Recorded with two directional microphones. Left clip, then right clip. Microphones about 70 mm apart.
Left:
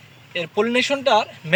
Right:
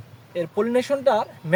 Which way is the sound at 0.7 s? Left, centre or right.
Right.